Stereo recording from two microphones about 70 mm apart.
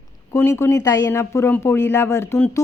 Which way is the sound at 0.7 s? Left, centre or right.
Left.